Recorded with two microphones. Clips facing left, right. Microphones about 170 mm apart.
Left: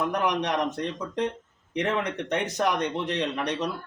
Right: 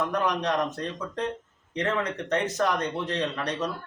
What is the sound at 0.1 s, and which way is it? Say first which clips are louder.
A man's voice: even; 15° left (ahead or behind).